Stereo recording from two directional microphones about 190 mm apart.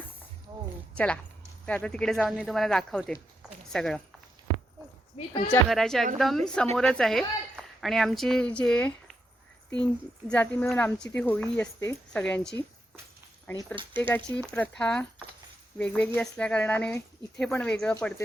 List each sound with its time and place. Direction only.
0.9 s a woman's voice: 5° left (ahead or behind)
5.1 s speech: 30° left (ahead or behind)
5.6 s speech: centre (ahead or behind)
13.7 s speech: 25° right (ahead or behind)
14.1 s speech: 5° left (ahead or behind)